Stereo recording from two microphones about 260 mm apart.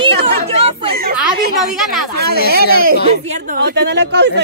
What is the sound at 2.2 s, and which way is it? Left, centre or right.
A woman's voice, right.